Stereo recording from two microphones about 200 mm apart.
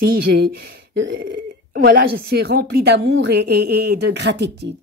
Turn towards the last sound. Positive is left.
turn(degrees=-60)  # may be behind; listen again after turning